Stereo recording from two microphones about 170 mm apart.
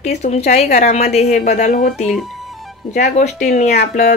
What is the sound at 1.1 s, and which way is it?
Speech, 40° left (ahead or behind).